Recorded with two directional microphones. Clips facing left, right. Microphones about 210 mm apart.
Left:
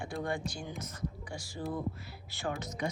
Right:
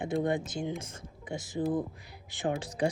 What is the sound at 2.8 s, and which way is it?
Speech, 30° right (ahead or behind).